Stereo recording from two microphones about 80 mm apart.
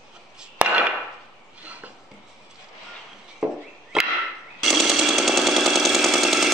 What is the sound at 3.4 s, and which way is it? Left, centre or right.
Chop, centre.